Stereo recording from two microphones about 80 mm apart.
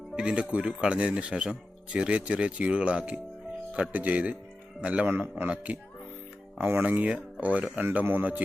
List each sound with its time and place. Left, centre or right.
0.2 s speech: centre
5.0 s speech: right